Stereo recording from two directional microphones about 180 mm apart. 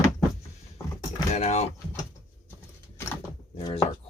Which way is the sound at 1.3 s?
40° left (ahead or behind).